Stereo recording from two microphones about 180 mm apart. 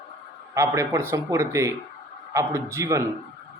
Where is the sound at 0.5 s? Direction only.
15° right (ahead or behind).